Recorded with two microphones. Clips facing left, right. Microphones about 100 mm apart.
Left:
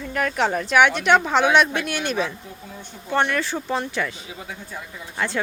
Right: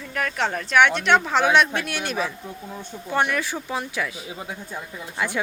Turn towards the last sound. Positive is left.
turn(degrees=-10)  # may be behind; listen again after turning